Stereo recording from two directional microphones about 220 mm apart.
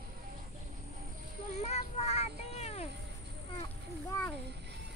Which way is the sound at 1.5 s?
30° left (ahead or behind).